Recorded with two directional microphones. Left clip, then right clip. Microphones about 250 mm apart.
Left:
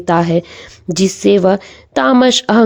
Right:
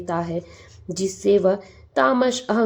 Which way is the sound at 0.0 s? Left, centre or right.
Left.